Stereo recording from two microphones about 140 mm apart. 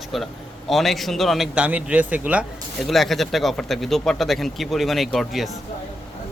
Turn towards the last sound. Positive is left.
turn(degrees=0)  # may be behind; listen again after turning